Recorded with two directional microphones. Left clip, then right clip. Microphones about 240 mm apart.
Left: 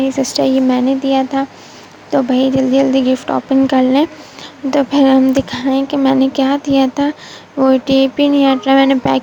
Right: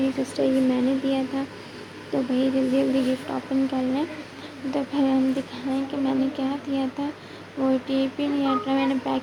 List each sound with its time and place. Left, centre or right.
0.2 s speech: left